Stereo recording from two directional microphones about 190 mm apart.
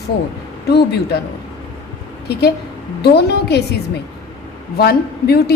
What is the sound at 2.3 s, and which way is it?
A woman's voice, 60° left (ahead or behind).